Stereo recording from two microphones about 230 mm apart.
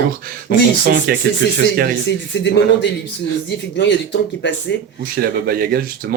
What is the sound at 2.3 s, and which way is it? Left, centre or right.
Speech, left.